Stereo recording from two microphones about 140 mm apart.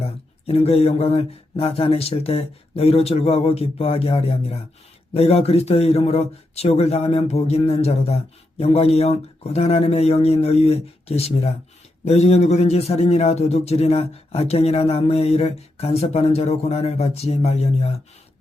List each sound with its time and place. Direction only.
0.0 s a man's voice: 45° left (ahead or behind)